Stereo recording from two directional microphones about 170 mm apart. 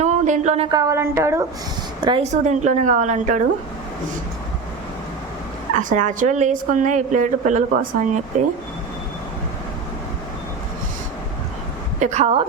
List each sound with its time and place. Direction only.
0.0 s a sound: 45° right (ahead or behind)
0.7 s a woman's voice: 20° right (ahead or behind)
2.2 s a woman's voice: 45° right (ahead or behind)
5.7 s a woman's voice: 45° right (ahead or behind)
11.9 s a woman's voice: 45° right (ahead or behind)